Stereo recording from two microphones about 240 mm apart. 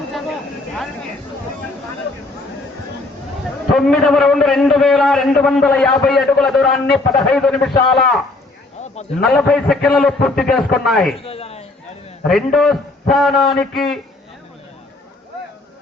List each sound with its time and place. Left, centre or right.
3.7 s a man's voice: centre
9.2 s a man's voice: centre
11.2 s a man's voice: left
12.2 s a man's voice: centre